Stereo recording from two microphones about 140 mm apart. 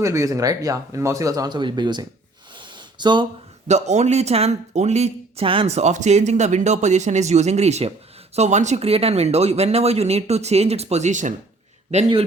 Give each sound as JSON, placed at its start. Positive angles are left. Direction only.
{"t": 0.0, "sound": "speech", "side_deg": -20}
{"t": 3.7, "sound": "speech", "side_deg": -55}